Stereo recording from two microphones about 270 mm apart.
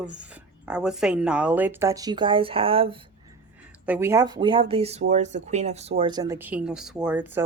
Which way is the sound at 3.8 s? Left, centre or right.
Centre.